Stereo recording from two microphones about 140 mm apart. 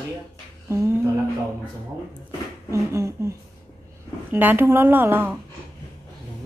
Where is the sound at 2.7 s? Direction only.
20° right (ahead or behind).